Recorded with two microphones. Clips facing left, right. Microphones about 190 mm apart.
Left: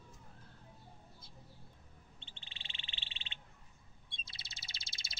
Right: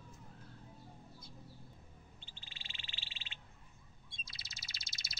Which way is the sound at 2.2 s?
30° left (ahead or behind).